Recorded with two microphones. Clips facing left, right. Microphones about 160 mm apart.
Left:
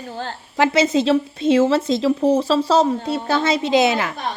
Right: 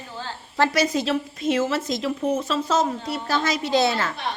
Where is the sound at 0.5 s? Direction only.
20° left (ahead or behind).